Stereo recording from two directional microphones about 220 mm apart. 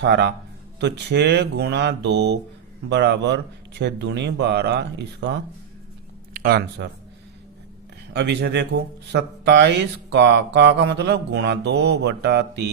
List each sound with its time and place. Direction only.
0.0 s speech: 50° right (ahead or behind)
8.1 s speech: 50° right (ahead or behind)